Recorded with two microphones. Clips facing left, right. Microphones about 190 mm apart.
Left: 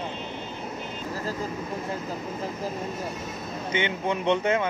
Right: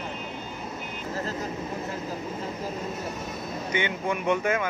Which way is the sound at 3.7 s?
20° left (ahead or behind).